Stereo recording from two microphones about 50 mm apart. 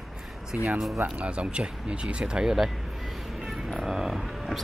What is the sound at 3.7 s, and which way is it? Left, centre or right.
Speech, centre.